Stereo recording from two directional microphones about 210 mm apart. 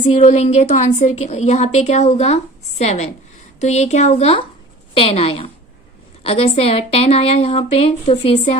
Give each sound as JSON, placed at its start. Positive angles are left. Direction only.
{"t": 0.0, "sound": "a woman's voice", "side_deg": 35}